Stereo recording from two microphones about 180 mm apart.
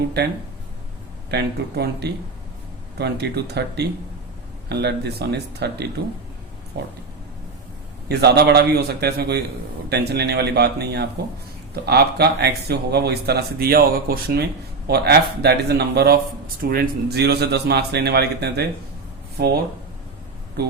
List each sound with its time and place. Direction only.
1.3 s speech: 65° right (ahead or behind)
8.0 s speech: 65° right (ahead or behind)